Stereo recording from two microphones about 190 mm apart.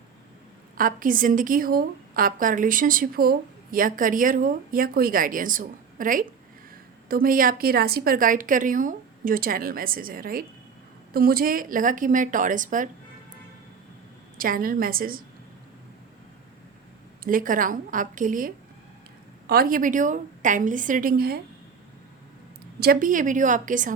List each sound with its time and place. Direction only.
0.8 s a woman's voice: 45° right (ahead or behind)
14.3 s a woman's voice: 50° right (ahead or behind)
17.2 s a woman's voice: 45° right (ahead or behind)
22.8 s a woman's voice: 50° right (ahead or behind)